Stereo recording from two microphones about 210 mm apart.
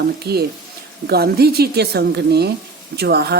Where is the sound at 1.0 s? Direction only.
50° right (ahead or behind).